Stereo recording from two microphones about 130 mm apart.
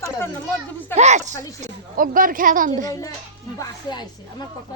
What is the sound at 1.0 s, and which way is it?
Speech, 60° right (ahead or behind).